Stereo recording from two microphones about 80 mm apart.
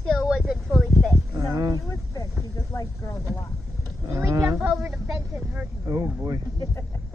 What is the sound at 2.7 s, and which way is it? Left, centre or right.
Speech, left.